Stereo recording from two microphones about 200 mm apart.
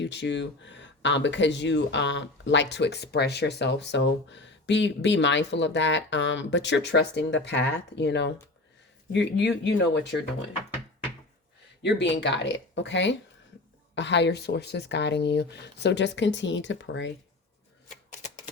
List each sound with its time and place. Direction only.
0.0 s speech: 60° left (ahead or behind)
11.8 s speech: 60° left (ahead or behind)
17.8 s shuffling cards: 35° left (ahead or behind)